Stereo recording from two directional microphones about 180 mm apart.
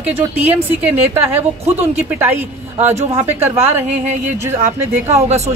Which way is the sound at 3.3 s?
10° right (ahead or behind).